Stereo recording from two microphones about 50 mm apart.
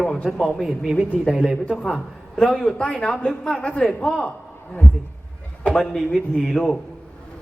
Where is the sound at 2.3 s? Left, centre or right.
Centre.